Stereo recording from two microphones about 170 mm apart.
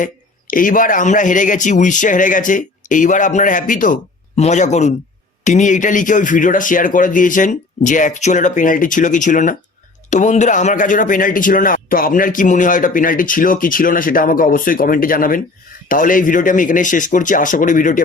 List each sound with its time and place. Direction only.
0.0 s a man's voice: 55° left (ahead or behind)